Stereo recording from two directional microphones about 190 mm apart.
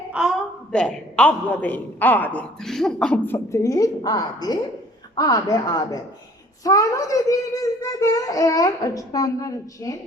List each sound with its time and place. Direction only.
0.1 s a man's voice: 5° right (ahead or behind); by 10.0 s 20° left (ahead or behind)